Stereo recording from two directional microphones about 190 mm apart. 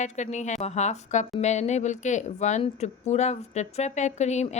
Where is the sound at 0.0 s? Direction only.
40° left (ahead or behind).